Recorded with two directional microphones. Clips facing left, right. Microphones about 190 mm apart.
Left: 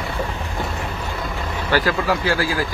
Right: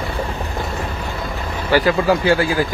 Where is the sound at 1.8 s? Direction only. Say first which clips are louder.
Right 5 dB; 25° right (ahead or behind).